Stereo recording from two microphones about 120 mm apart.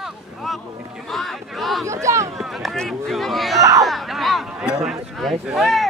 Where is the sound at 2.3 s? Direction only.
Centre (ahead or behind).